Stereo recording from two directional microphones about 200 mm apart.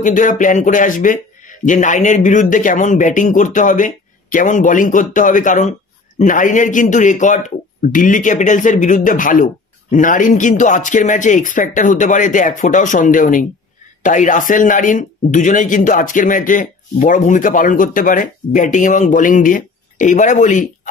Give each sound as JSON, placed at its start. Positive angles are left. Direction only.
{"t": 0.0, "sound": "speech", "side_deg": 40}